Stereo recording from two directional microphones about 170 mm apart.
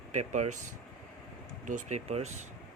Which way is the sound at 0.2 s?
45° right (ahead or behind).